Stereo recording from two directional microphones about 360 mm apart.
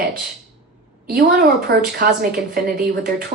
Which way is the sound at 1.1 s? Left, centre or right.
Right.